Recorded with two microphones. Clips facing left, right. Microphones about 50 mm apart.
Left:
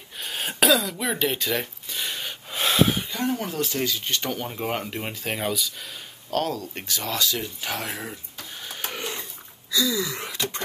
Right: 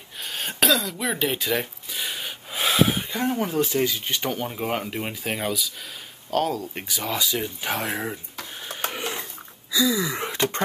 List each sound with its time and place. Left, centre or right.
0.2 s cough: centre
3.1 s speech: centre
8.5 s printer: centre
9.7 s a sound: centre